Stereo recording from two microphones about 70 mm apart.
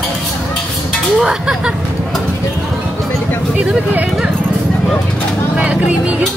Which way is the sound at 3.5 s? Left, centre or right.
Centre.